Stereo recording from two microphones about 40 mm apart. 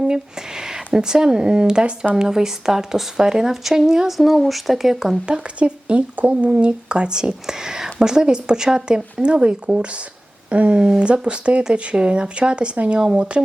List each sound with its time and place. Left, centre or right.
0.0 s a sound: centre
0.9 s speech: centre
4.3 s speech: centre
5.2 s speech: right